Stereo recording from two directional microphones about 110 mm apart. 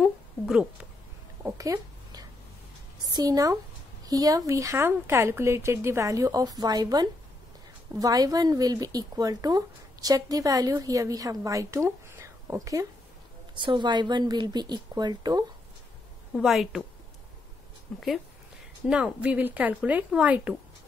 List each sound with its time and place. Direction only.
0.0 s a sound: 5° right (ahead or behind)
1.4 s a sound: 30° right (ahead or behind)
3.1 s a woman's voice: 35° right (ahead or behind)
13.6 s a woman's voice: 45° right (ahead or behind)
16.3 s a woman's voice: centre (ahead or behind)
17.9 s a woman's voice: centre (ahead or behind)